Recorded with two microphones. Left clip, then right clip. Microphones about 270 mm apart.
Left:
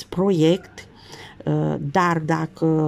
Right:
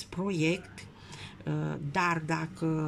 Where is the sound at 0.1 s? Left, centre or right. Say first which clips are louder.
Left 13 dB; left.